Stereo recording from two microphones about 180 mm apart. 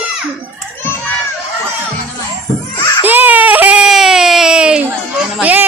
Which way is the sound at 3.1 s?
10° right (ahead or behind).